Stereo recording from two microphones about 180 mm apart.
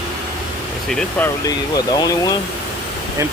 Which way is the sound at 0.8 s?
5° left (ahead or behind).